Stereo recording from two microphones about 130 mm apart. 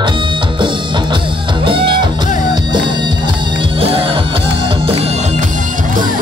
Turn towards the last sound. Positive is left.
turn(degrees=-45)  # may be behind; listen again after turning